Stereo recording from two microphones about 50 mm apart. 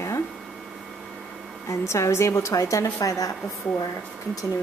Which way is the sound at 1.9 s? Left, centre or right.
Left.